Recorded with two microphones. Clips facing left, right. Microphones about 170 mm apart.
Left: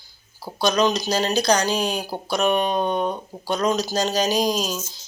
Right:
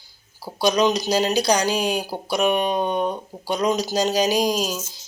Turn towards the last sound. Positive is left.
turn(degrees=-10)  # may be behind; listen again after turning